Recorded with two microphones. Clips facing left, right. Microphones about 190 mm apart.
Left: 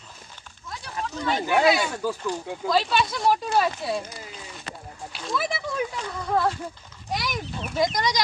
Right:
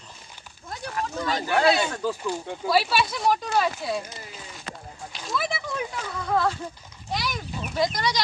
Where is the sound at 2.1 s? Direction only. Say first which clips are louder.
Even; 10° right (ahead or behind).